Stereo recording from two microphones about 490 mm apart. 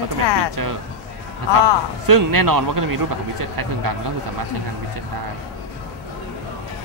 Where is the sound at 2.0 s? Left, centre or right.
Right.